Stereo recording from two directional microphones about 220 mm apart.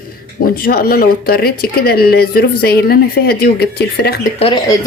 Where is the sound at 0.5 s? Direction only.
45° left (ahead or behind).